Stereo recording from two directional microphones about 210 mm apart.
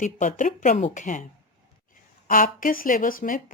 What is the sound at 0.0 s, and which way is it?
Speech, 35° left (ahead or behind).